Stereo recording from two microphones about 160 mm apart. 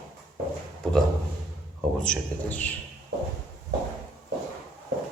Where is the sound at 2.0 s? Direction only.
5° left (ahead or behind).